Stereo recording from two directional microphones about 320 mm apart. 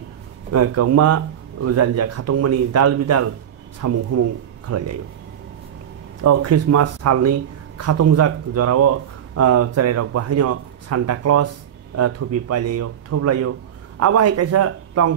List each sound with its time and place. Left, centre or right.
0.5 s speech: right
6.2 s speech: right